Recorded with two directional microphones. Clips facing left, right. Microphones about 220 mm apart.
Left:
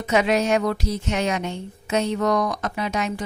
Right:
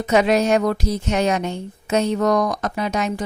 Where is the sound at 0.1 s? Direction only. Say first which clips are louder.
Right 3 dB; 40° right (ahead or behind).